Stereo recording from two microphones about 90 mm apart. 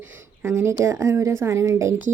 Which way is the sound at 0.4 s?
30° right (ahead or behind).